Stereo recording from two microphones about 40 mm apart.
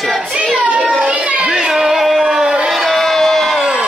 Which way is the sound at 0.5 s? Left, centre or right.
Right.